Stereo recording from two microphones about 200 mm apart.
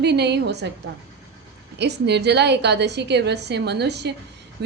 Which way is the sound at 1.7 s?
55° right (ahead or behind).